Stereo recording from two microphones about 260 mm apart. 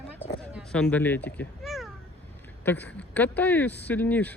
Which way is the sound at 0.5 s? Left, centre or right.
Centre.